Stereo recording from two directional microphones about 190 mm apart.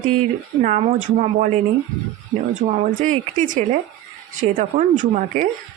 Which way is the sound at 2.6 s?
40° right (ahead or behind).